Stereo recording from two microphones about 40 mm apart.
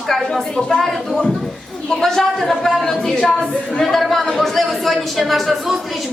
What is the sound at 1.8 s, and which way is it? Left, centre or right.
A woman's voice, centre.